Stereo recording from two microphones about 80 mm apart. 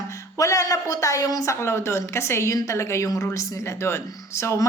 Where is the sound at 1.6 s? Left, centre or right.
Left.